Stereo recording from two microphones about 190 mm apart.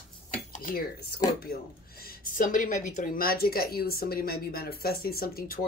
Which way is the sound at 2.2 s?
45° left (ahead or behind).